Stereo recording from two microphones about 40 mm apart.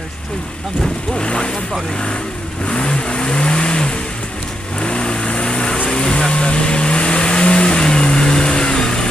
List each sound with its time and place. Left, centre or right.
1.1 s speech: left
2.6 s vehicle: left